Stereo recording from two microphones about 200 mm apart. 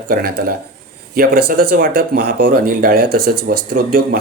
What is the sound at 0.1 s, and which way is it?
Speech, 50° right (ahead or behind).